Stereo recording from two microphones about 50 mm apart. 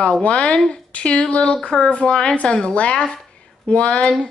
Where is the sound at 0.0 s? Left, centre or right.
Left.